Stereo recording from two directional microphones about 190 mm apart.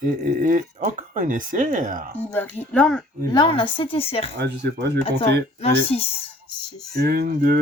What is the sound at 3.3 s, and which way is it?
Speech, 25° left (ahead or behind).